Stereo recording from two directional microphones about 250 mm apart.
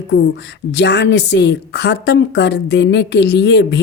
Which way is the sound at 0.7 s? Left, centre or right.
Left.